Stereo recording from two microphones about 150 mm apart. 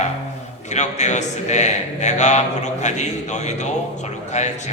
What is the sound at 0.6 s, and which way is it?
Speech, 50° left (ahead or behind).